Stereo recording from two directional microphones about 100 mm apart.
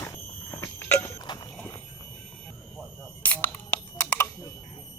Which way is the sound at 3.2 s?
15° left (ahead or behind).